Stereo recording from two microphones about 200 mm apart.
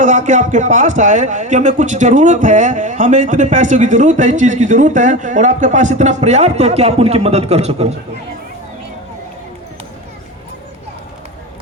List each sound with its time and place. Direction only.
0.0 s a man's voice: 40° right (ahead or behind)